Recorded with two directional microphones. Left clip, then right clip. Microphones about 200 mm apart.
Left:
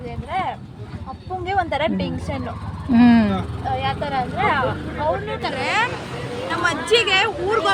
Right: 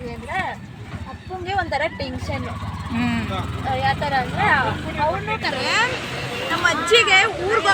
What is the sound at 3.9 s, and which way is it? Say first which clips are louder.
Speech: right 2 dB; 35° left (ahead or behind).